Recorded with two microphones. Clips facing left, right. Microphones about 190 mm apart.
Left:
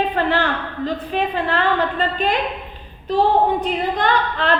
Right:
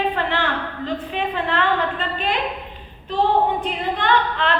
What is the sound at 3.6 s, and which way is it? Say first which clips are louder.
Speech: left 4 dB; 40° left (ahead or behind).